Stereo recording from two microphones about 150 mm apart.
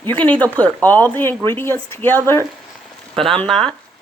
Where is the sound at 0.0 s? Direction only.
10° left (ahead or behind).